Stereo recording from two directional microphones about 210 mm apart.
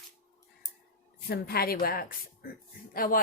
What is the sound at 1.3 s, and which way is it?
Speech, 45° left (ahead or behind).